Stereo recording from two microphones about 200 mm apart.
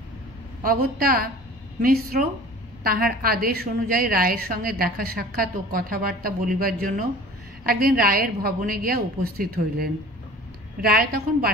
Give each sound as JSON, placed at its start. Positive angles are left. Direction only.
{"t": 0.6, "sound": "a woman's voice", "side_deg": -45}